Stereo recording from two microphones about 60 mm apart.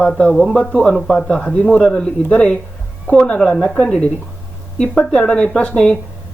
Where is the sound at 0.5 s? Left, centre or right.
Centre.